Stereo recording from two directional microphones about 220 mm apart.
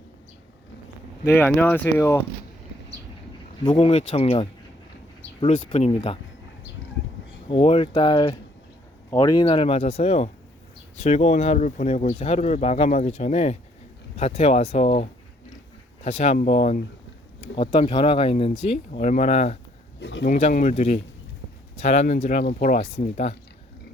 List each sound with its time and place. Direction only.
1.2 s speech: 10° left (ahead or behind)
3.6 s speech: 20° left (ahead or behind)
7.4 s speech: 25° left (ahead or behind)
20.0 s speech: 55° left (ahead or behind)
20.3 s speech: 35° left (ahead or behind)